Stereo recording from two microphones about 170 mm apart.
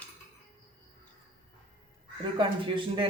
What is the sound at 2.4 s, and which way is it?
Speech, 30° right (ahead or behind).